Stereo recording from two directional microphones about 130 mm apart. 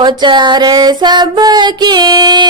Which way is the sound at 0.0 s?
35° right (ahead or behind).